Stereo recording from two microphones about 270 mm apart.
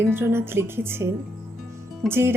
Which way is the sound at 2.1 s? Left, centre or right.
Centre.